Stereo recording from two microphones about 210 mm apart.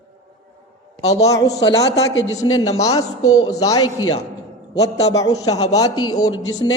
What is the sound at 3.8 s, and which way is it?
Speech, 75° left (ahead or behind).